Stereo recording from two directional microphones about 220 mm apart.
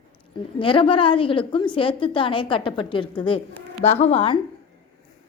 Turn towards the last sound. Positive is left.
turn(degrees=25)  # may be behind; listen again after turning